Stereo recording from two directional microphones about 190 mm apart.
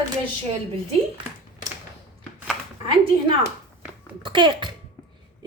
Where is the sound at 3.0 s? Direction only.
30° right (ahead or behind).